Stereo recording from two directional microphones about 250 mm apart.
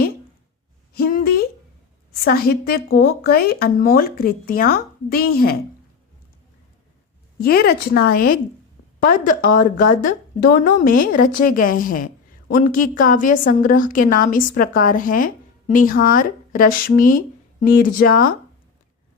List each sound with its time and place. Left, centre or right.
0.9 s a sound: left
2.2 s a woman's voice: left
7.4 s a woman's voice: left